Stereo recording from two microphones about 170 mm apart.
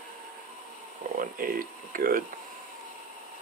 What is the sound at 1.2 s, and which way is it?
Speech, 55° right (ahead or behind).